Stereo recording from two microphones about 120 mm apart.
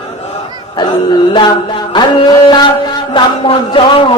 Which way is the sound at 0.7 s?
40° left (ahead or behind).